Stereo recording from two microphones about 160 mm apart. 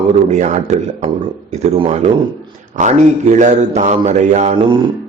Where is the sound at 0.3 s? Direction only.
45° right (ahead or behind).